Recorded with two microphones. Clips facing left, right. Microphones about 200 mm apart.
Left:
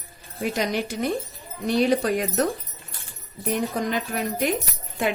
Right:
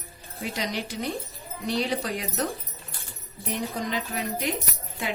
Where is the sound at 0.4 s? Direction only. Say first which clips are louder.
Left 6 dB; 50° left (ahead or behind).